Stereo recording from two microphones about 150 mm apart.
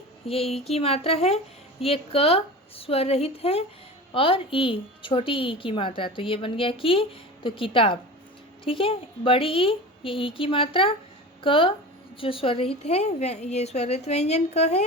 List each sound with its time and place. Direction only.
0.3 s a woman's voice: 40° left (ahead or behind)